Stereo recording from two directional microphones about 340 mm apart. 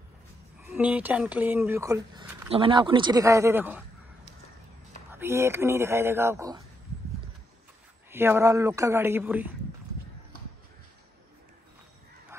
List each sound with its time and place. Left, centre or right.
0.7 s speech: centre
5.1 s speech: centre
8.1 s speech: centre